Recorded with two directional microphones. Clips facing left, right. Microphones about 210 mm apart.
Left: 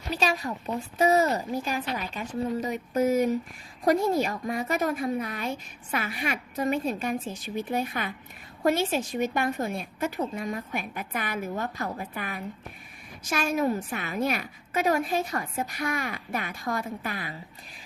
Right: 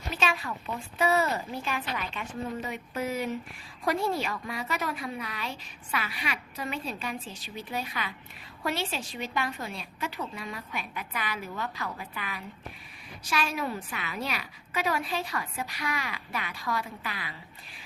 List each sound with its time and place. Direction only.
0.1 s a woman's voice: 40° left (ahead or behind)